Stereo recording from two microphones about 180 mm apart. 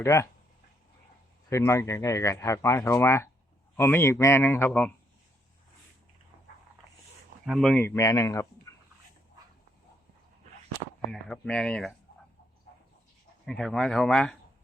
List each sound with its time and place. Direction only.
0.0 s speech: 15° left (ahead or behind)
1.5 s speech: 15° left (ahead or behind)
7.4 s speech: centre (ahead or behind); by 8.7 s 15° left (ahead or behind)
11.1 s speech: 5° left (ahead or behind)
13.4 s speech: centre (ahead or behind)